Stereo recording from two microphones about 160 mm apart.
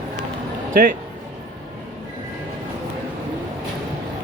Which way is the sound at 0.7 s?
60° right (ahead or behind).